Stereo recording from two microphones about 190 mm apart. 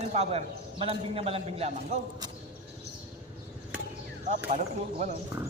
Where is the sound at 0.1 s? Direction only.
35° right (ahead or behind).